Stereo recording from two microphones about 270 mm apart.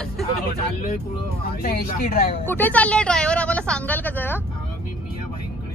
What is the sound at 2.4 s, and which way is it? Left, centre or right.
A woman's voice, centre.